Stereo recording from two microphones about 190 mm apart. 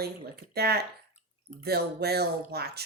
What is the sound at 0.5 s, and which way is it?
Speech, 55° right (ahead or behind).